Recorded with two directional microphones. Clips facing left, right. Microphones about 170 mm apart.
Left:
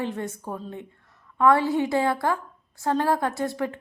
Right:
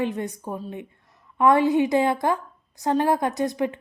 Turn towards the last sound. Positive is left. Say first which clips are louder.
# right 3 dB
turn(degrees=-15)  # may be behind; listen again after turning